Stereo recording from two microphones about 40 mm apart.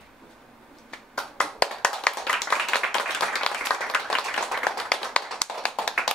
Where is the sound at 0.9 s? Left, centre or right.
Centre.